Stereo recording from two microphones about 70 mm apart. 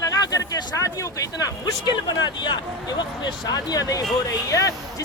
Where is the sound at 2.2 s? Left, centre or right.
Left.